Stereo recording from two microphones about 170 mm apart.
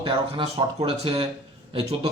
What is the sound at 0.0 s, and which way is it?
Speech, 30° right (ahead or behind).